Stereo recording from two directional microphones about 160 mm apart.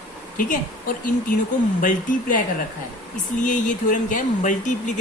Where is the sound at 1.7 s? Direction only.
55° left (ahead or behind).